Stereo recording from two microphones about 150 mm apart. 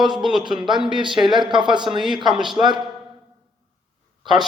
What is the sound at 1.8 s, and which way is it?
Speech, centre (ahead or behind).